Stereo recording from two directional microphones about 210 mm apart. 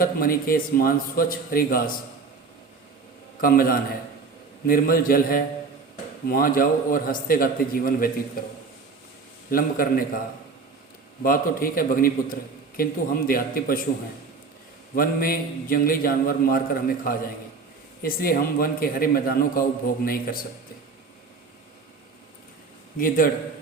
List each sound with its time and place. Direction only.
0.0 s a man's voice: 45° left (ahead or behind)
3.4 s a man's voice: 45° left (ahead or behind)
11.2 s a man's voice: 45° left (ahead or behind)
14.9 s a man's voice: 45° left (ahead or behind)
23.0 s a man's voice: 40° left (ahead or behind)